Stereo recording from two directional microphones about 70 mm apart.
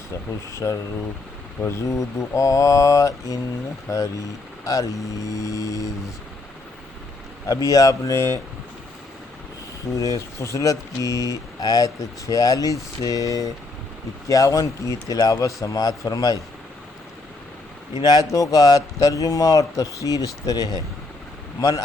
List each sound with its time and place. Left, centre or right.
0.5 s speech: left
7.4 s speech: left
9.9 s speech: left
17.9 s speech: left